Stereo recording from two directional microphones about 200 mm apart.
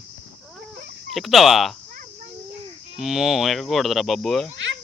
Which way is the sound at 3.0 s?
Centre (ahead or behind).